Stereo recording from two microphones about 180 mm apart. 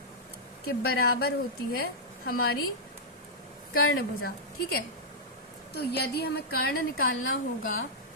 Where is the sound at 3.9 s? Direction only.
60° left (ahead or behind).